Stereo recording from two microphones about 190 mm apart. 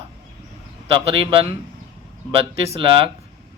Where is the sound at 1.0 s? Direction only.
30° right (ahead or behind).